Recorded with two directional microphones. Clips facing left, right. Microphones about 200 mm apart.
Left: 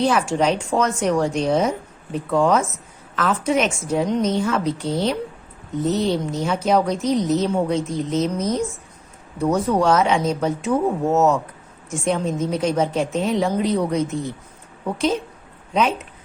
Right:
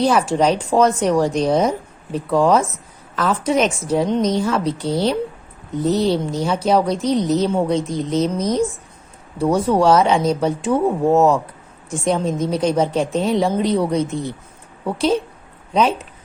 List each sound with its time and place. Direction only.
0.0 s a woman's voice: 35° right (ahead or behind)
11.9 s a woman's voice: 35° right (ahead or behind)
15.7 s speech: 35° right (ahead or behind)